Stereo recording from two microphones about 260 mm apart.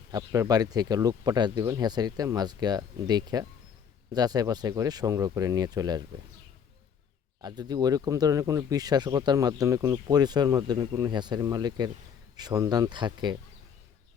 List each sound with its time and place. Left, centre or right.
0.1 s speech: centre
7.4 s speech: centre